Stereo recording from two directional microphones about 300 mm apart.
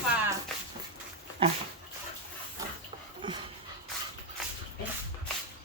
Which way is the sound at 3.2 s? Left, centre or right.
Centre.